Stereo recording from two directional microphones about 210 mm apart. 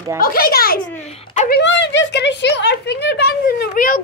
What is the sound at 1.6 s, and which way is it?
Speech, 55° left (ahead or behind).